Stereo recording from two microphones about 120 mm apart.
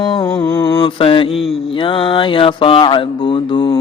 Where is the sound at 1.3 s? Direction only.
Centre (ahead or behind).